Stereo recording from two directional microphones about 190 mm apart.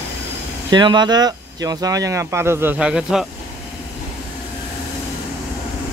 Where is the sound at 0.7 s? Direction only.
25° right (ahead or behind); by 3.3 s 5° right (ahead or behind).